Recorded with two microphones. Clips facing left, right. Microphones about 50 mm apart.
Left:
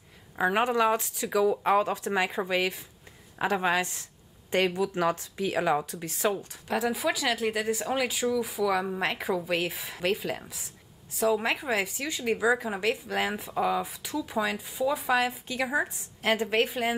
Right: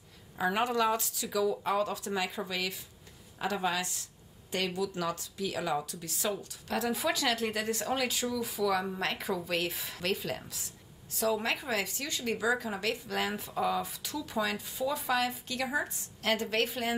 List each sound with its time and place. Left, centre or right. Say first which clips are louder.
0.4 s speech: left 4 dB; left
6.7 s speech: left 3 dB; centre